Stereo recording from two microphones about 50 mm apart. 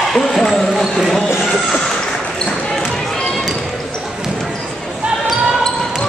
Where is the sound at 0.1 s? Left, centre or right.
Centre.